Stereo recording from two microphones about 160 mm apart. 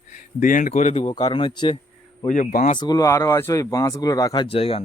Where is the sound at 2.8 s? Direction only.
25° left (ahead or behind).